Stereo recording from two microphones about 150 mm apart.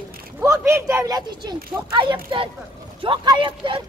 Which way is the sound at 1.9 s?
35° right (ahead or behind).